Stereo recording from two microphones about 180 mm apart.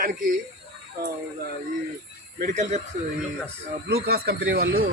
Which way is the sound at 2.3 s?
45° right (ahead or behind).